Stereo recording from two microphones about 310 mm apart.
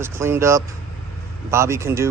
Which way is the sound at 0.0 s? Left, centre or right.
Centre.